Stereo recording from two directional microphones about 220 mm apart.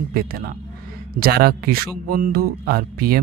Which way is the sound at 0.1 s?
40° right (ahead or behind).